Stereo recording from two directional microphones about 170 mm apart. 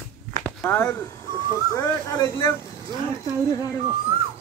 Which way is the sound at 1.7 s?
20° left (ahead or behind).